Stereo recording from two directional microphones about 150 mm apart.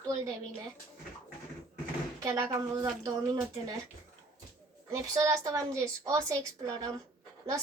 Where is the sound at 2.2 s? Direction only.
20° right (ahead or behind).